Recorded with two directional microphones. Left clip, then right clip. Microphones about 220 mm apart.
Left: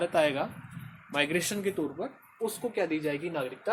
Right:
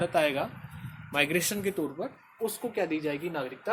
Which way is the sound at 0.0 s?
5° left (ahead or behind).